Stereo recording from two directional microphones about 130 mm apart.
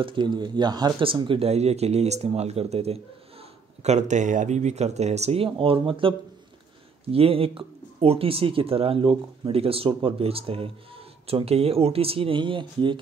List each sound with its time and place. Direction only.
0.0 s speech: 40° right (ahead or behind)
3.8 s speech: 65° right (ahead or behind); by 13.0 s 40° right (ahead or behind)